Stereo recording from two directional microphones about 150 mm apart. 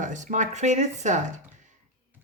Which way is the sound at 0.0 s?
55° right (ahead or behind).